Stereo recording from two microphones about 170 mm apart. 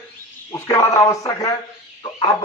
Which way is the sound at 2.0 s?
25° left (ahead or behind).